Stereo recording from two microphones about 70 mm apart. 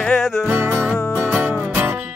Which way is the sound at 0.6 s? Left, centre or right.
Right.